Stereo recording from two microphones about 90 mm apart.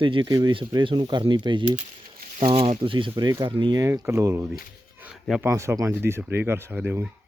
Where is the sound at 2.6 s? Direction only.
70° right (ahead or behind).